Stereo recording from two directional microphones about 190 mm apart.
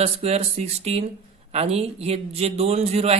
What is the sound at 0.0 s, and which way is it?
A man's voice, 35° right (ahead or behind).